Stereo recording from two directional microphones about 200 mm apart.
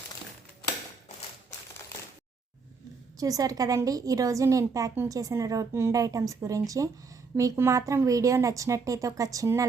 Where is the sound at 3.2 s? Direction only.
15° right (ahead or behind).